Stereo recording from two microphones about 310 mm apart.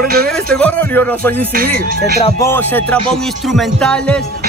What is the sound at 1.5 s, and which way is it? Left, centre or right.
Music, right.